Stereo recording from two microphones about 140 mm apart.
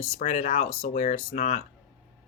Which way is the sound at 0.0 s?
50° left (ahead or behind).